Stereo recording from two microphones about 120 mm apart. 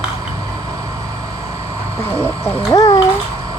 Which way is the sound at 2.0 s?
20° left (ahead or behind).